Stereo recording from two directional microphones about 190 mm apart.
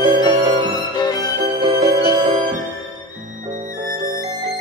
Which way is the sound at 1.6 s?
25° right (ahead or behind).